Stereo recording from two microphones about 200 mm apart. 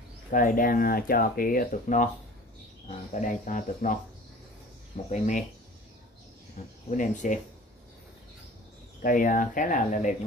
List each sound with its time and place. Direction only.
0.3 s speech: 40° left (ahead or behind)
3.1 s speech: 40° left (ahead or behind)
5.1 s speech: 35° left (ahead or behind)
6.9 s speech: 40° left (ahead or behind)
9.0 s speech: 40° left (ahead or behind)